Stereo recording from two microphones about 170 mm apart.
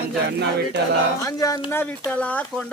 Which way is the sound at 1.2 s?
20° left (ahead or behind).